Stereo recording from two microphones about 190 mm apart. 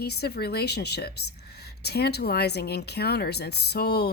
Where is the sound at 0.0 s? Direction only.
60° left (ahead or behind).